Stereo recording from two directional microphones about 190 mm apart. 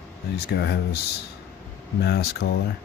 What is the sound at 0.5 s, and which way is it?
Speech, 65° left (ahead or behind).